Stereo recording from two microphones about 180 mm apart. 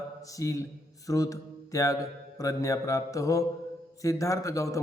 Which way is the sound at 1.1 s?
20° left (ahead or behind).